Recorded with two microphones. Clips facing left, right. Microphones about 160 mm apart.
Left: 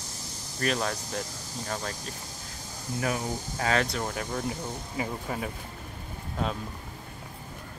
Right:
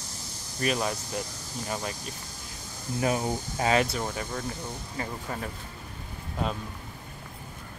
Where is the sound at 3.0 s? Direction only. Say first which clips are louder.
Right 3 dB; 25° right (ahead or behind).